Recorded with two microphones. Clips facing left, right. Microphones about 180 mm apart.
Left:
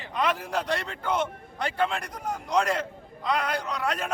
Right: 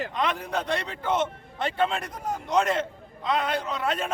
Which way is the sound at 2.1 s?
25° right (ahead or behind).